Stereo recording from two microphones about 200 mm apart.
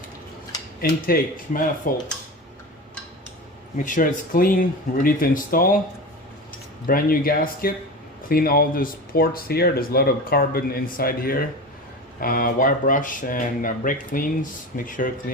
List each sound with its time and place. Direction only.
0.8 s speech: 50° left (ahead or behind)
3.8 s speech: 40° left (ahead or behind)
6.8 s speech: 45° left (ahead or behind)